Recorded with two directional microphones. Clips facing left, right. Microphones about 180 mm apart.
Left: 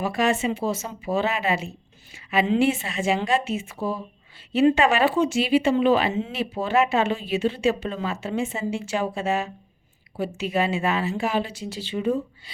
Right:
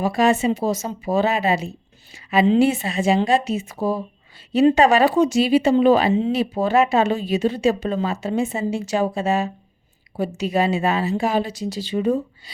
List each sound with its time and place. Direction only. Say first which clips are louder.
0.0 s speech: right 5 dB; 35° right (ahead or behind)